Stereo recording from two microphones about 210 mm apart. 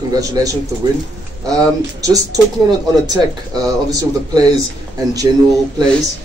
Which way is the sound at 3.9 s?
15° right (ahead or behind).